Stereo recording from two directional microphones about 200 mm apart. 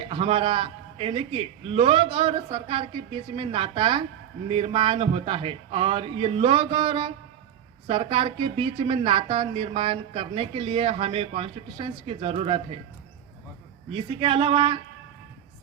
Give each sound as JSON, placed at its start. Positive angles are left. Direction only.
{"t": 0.0, "sound": "speech", "side_deg": -30}
{"t": 13.9, "sound": "speech", "side_deg": -25}